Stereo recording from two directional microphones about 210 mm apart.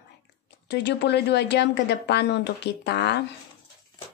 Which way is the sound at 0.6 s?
50° left (ahead or behind).